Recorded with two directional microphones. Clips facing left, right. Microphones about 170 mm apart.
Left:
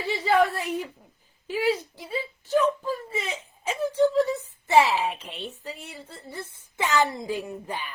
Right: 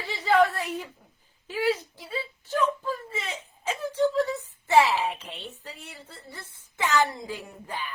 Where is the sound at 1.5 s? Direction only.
15° left (ahead or behind).